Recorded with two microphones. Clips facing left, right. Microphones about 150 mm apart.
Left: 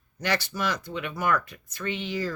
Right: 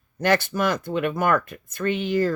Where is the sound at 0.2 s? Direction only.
50° right (ahead or behind).